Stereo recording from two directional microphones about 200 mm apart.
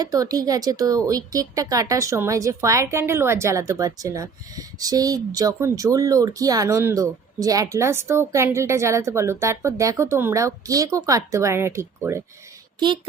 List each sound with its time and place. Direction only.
0.0 s speech: 20° right (ahead or behind)